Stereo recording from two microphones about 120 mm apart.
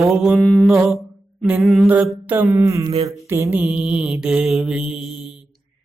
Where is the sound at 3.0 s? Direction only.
25° right (ahead or behind).